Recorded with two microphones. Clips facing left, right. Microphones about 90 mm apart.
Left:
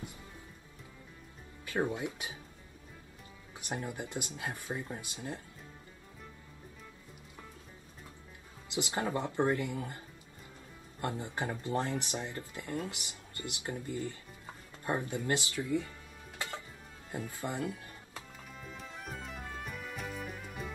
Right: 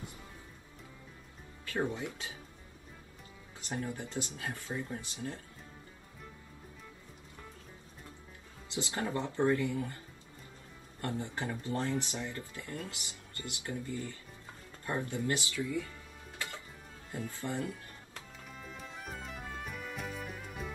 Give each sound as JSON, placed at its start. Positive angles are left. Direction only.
{"t": 1.7, "sound": "speech", "side_deg": 15}
{"t": 3.5, "sound": "speech", "side_deg": 20}
{"t": 8.7, "sound": "speech", "side_deg": 20}
{"t": 16.3, "sound": "music", "side_deg": 20}
{"t": 17.1, "sound": "speech", "side_deg": 20}
{"t": 18.5, "sound": "music", "side_deg": 0}